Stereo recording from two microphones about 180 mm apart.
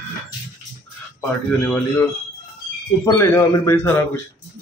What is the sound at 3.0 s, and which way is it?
Speech, 15° left (ahead or behind).